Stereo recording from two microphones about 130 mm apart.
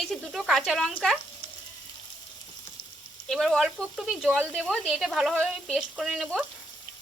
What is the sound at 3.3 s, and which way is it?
Speech, centre (ahead or behind).